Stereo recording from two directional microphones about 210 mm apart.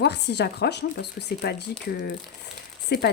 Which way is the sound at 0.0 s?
55° left (ahead or behind).